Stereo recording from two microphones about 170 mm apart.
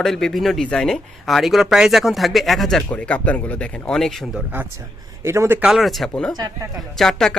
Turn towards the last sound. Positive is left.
turn(degrees=0)  # may be behind; listen again after turning